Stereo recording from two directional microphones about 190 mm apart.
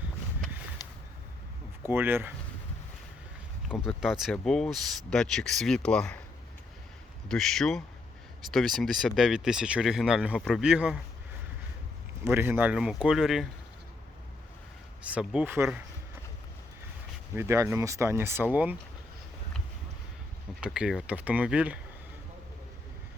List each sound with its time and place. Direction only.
0.8 s a sound: 20° left (ahead or behind)
1.9 s speech: 10° right (ahead or behind)
3.7 s speech: centre (ahead or behind)
7.3 s speech: centre (ahead or behind)
12.2 s speech: 10° right (ahead or behind)
15.0 s speech: 5° right (ahead or behind)
17.3 s speech: 15° right (ahead or behind)
20.6 s speech: 5° right (ahead or behind)